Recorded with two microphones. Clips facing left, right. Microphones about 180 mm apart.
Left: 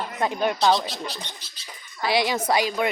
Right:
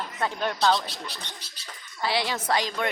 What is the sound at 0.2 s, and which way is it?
Speech, 15° left (ahead or behind).